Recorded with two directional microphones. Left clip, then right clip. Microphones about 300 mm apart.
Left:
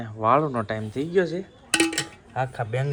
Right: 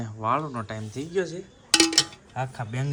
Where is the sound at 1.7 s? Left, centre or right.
Right.